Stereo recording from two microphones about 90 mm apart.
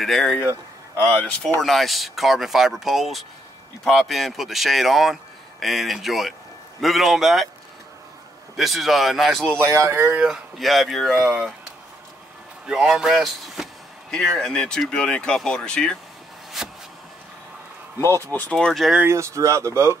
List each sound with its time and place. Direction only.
0.0 s speech: centre (ahead or behind)
0.5 s speech: 20° left (ahead or behind)
1.6 s speech: centre (ahead or behind)
8.5 s speech: centre (ahead or behind)
9.6 s speech: 25° right (ahead or behind)
10.2 s speech: 5° right (ahead or behind)
12.6 s speech: 5° right (ahead or behind); by 16.0 s 10° left (ahead or behind)
16.6 s a sound: 5° right (ahead or behind)
18.3 s speech: 15° left (ahead or behind)
19.0 s speech: 30° right (ahead or behind)